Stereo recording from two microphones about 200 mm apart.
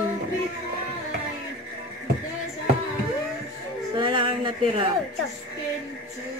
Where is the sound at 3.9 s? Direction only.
25° right (ahead or behind).